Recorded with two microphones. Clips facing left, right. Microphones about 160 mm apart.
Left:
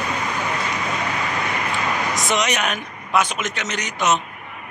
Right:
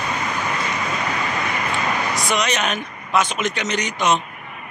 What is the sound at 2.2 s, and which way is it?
Speech, 20° left (ahead or behind).